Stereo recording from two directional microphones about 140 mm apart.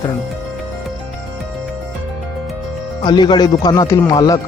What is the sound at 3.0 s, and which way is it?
Speech, 35° left (ahead or behind).